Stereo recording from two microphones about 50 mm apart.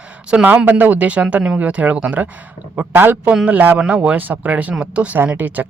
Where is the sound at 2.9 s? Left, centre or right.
Right.